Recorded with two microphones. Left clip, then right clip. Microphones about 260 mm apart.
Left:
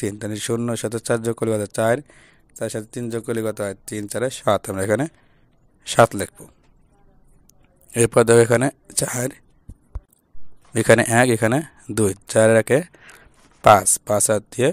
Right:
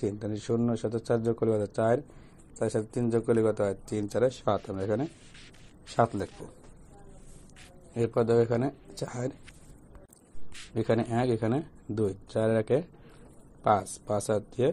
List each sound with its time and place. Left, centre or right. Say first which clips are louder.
0.0 s speech: left 6 dB; left
7.9 s speech: left 11 dB; left
10.7 s speech: left 13 dB; left